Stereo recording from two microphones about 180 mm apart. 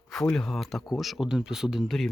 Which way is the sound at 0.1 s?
5° left (ahead or behind).